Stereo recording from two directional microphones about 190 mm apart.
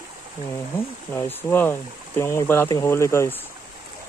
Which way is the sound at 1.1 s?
10° left (ahead or behind).